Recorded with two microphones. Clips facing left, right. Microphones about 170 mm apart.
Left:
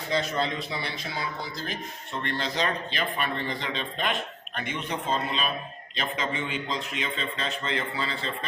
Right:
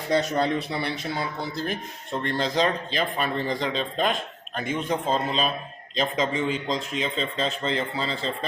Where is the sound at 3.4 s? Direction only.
35° right (ahead or behind).